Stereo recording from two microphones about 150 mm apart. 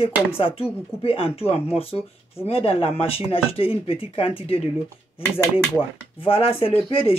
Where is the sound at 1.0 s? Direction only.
40° left (ahead or behind).